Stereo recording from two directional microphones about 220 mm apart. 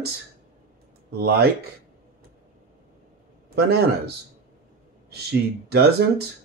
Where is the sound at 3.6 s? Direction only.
45° right (ahead or behind).